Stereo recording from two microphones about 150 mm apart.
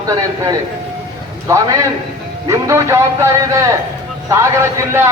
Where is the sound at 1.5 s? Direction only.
20° right (ahead or behind).